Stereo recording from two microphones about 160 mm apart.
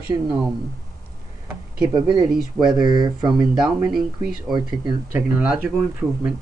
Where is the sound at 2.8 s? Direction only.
25° right (ahead or behind).